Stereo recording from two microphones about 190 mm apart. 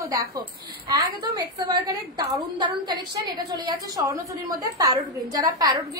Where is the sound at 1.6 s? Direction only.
20° right (ahead or behind).